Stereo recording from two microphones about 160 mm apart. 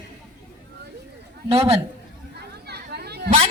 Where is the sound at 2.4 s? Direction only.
90° right.